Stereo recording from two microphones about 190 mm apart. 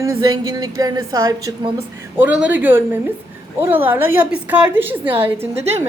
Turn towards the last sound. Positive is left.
turn(degrees=-10)  # may be behind; listen again after turning